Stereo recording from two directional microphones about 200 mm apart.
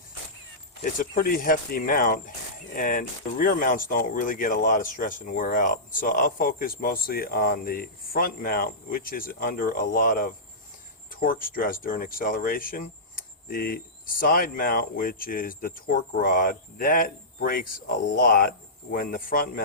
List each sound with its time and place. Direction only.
0.8 s speech: 45° left (ahead or behind)